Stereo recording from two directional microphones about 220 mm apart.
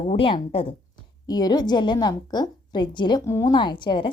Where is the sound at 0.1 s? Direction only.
25° left (ahead or behind).